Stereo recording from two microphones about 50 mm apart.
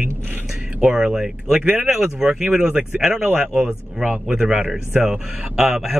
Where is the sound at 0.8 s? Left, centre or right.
Centre.